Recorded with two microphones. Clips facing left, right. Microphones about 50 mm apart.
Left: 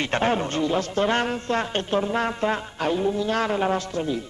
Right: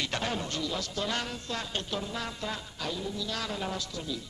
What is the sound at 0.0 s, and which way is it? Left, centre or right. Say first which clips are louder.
A man's voice: left 10 dB; left.